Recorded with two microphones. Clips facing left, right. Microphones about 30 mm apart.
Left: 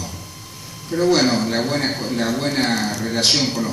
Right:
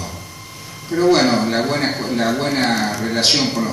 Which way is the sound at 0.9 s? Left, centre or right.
Centre.